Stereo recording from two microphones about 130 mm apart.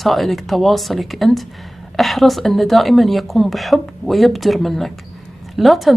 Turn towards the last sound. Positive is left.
turn(degrees=0)  # may be behind; listen again after turning